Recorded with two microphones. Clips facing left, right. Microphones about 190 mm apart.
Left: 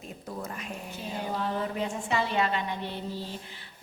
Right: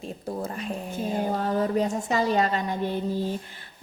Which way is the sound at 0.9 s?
45° right (ahead or behind).